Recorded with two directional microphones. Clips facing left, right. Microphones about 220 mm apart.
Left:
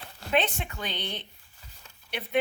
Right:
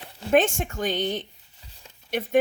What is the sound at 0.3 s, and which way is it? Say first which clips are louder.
Speech: right 7 dB; 45° right (ahead or behind).